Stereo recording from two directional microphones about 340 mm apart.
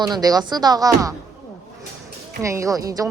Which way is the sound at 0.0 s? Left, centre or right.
Centre.